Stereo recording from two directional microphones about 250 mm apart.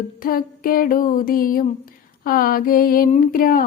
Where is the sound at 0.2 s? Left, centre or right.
Left.